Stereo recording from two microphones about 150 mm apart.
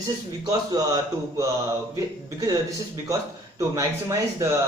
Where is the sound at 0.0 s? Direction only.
25° right (ahead or behind).